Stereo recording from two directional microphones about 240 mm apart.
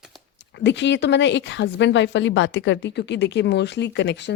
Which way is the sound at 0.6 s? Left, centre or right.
Left.